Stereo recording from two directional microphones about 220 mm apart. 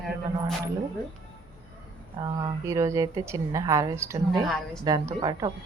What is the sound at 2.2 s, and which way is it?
A woman's voice, 20° right (ahead or behind).